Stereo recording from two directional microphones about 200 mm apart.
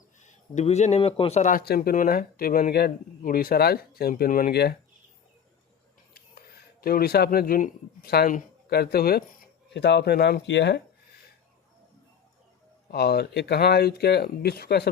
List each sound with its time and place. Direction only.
0.2 s speech: 35° left (ahead or behind); by 4.8 s 50° left (ahead or behind)
6.8 s speech: 50° left (ahead or behind)
12.9 s speech: 50° left (ahead or behind)